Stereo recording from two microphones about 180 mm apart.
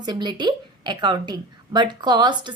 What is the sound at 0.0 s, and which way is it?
A woman's voice, 25° right (ahead or behind).